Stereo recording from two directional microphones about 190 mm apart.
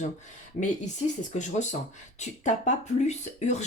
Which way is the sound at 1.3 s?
40° left (ahead or behind).